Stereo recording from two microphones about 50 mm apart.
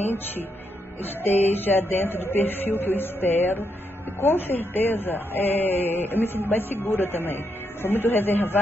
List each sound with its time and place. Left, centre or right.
1.2 s speech: left